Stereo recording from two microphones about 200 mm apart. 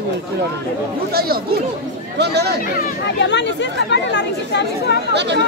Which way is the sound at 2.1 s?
55° right (ahead or behind).